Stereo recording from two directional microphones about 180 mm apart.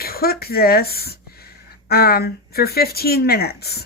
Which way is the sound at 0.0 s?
55° left (ahead or behind).